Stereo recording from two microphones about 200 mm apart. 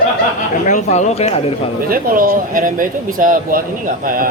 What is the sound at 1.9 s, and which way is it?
Speech, 45° right (ahead or behind).